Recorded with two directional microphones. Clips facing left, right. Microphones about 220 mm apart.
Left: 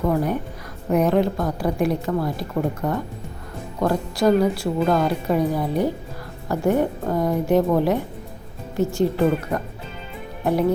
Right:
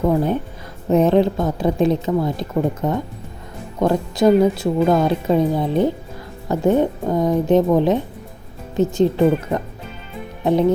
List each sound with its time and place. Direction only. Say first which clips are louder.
0.0 s a woman's voice: right 3 dB; 25° right (ahead or behind)